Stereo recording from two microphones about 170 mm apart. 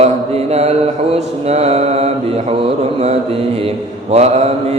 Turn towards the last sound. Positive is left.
turn(degrees=-40)  # may be behind; listen again after turning